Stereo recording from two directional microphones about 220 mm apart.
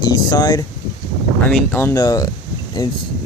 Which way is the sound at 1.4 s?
10° left (ahead or behind).